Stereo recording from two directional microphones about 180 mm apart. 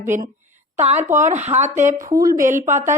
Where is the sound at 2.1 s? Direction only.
20° right (ahead or behind).